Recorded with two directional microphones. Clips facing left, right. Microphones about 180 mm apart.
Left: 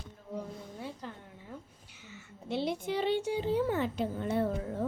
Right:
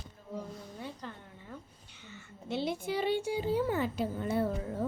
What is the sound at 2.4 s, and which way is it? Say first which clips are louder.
Speech: left 1 dB; centre (ahead or behind).